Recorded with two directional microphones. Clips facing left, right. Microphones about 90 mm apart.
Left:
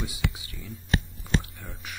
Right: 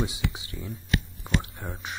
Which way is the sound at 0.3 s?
25° right (ahead or behind).